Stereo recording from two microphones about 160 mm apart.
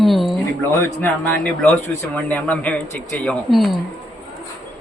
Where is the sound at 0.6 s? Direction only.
15° left (ahead or behind).